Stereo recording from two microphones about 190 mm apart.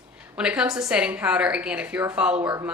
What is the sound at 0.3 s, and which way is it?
A woman's voice, 5° right (ahead or behind).